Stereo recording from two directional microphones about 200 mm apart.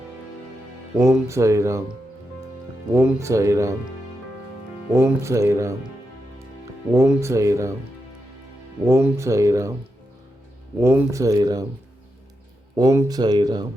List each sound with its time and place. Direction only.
1.3 s speech: 15° right (ahead or behind)
2.9 s speech: 15° right (ahead or behind)
4.9 s speech: 15° right (ahead or behind)
6.9 s speech: 15° right (ahead or behind)
8.8 s speech: 15° right (ahead or behind)
10.8 s speech: 15° right (ahead or behind)
12.7 s speech: 15° right (ahead or behind)